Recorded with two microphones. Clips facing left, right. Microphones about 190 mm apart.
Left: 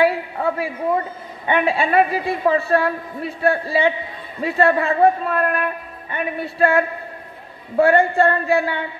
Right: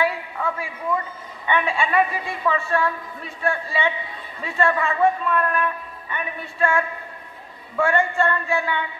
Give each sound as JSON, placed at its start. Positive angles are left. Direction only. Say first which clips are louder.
{"t": 0.0, "sound": "a woman's voice", "louder": "left 6 dB", "side_deg": 35}